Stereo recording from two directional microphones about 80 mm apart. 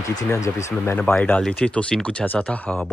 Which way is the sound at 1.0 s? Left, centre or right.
Centre.